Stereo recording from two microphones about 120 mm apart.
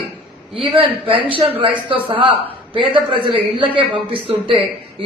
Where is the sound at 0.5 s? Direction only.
50° right (ahead or behind).